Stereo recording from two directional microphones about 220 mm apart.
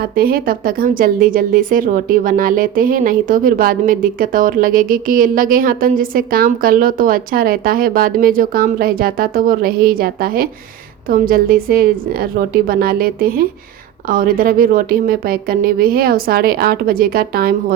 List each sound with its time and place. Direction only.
0.0 s a woman's voice: 40° right (ahead or behind)